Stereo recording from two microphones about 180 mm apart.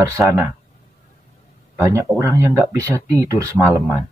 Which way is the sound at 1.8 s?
15° right (ahead or behind).